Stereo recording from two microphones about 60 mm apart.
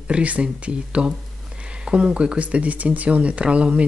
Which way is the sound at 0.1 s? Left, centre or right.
Right.